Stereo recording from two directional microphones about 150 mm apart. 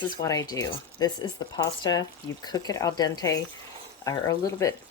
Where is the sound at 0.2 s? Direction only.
25° left (ahead or behind).